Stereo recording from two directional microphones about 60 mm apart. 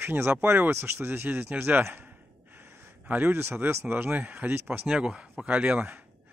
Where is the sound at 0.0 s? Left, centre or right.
Right.